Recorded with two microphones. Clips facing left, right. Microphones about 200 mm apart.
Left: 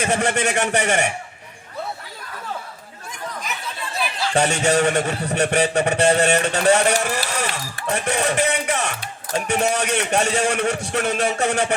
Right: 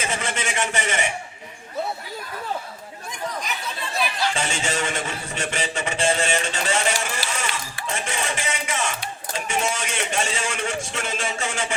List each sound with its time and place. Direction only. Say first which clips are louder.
0.0 s a man's voice: left 7 dB; 65° left (ahead or behind)
4.4 s a man's voice: left 8 dB; 65° left (ahead or behind)